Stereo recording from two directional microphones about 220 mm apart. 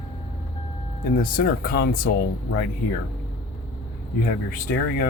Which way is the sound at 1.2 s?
40° left (ahead or behind).